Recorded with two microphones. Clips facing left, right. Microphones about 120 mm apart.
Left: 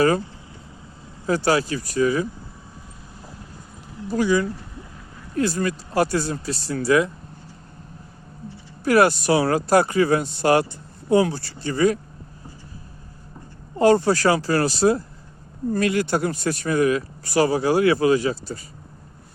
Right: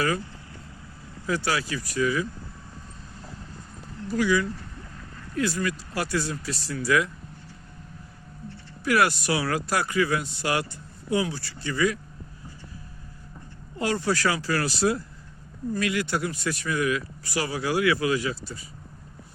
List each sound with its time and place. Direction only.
1.5 s speech: 35° left (ahead or behind)
4.1 s speech: 30° left (ahead or behind)
4.8 s a sound: 10° left (ahead or behind)
5.3 s speech: 25° left (ahead or behind)
5.5 s speech: 40° left (ahead or behind)
6.1 s speech: 30° left (ahead or behind)
8.8 s speech: 30° left (ahead or behind)
13.7 s speech: 35° left (ahead or behind)